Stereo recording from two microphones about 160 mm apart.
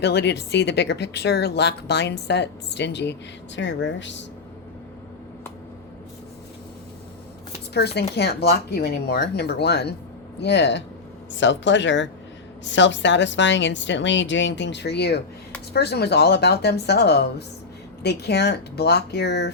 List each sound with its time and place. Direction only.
0.0 s speech: 90° left
7.7 s speech: 90° left